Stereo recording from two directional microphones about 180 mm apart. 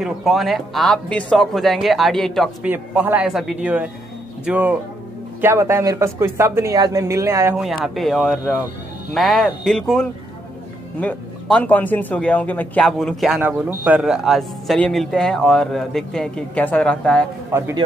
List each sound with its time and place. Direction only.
0.0 s speech: centre (ahead or behind)
2.7 s speech: 10° right (ahead or behind)
7.5 s speech: centre (ahead or behind)
17.5 s speech: 15° right (ahead or behind)